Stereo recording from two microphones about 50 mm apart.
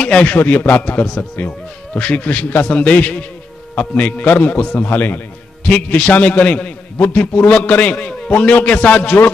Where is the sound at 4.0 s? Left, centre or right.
Left.